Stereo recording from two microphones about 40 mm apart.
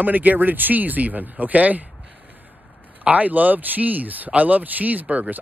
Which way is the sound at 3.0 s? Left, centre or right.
Right.